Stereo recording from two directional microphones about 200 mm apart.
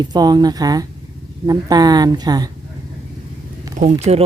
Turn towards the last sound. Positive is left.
turn(degrees=-35)  # may be behind; listen again after turning